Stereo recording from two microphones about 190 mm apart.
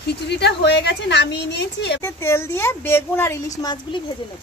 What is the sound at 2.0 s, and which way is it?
Speech, 15° left (ahead or behind).